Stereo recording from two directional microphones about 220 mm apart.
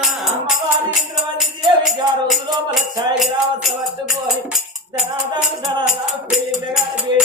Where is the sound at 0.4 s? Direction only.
Centre (ahead or behind).